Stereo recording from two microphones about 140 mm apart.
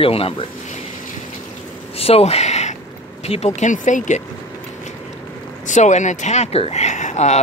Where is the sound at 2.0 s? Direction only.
45° left (ahead or behind); by 4.2 s 60° left (ahead or behind).